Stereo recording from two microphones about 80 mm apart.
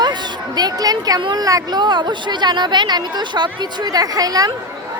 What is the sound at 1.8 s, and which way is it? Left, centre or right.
Speech, right.